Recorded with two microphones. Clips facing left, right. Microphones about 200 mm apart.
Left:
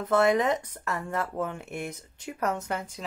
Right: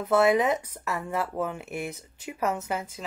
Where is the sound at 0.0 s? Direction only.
10° right (ahead or behind).